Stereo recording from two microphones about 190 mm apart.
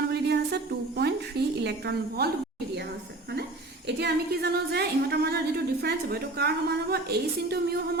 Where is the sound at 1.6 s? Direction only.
60° right (ahead or behind).